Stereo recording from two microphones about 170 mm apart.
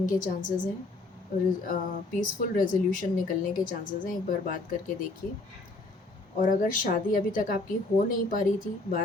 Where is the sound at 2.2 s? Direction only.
50° left (ahead or behind).